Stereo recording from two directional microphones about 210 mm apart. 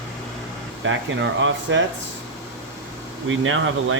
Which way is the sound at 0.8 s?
60° right (ahead or behind).